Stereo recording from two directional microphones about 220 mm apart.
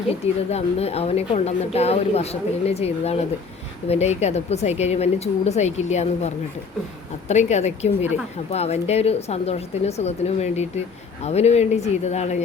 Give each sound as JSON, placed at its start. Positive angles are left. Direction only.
{"t": 0.5, "sound": "a woman's voice", "side_deg": 30}